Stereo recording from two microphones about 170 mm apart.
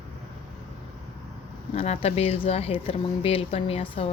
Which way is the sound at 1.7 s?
40° left (ahead or behind).